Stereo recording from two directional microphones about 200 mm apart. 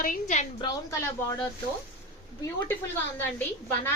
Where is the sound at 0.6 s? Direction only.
15° left (ahead or behind).